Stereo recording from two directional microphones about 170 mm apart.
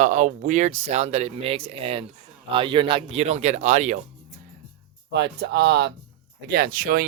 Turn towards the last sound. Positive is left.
turn(degrees=-60)  # may be behind; listen again after turning